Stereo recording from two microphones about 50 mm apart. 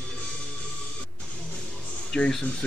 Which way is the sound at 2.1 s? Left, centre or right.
Centre.